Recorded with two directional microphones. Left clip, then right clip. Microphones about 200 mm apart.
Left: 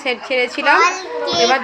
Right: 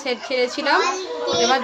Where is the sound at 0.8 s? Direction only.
60° left (ahead or behind).